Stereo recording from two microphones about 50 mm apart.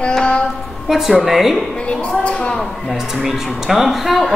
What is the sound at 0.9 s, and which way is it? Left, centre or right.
Speech, centre.